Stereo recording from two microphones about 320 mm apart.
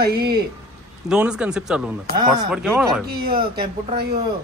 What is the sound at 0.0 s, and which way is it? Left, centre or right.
Speech, right.